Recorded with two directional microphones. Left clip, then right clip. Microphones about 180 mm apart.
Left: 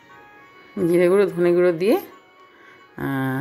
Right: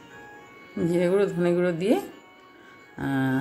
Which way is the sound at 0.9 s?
30° left (ahead or behind).